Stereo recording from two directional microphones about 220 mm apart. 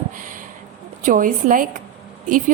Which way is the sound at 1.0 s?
40° right (ahead or behind).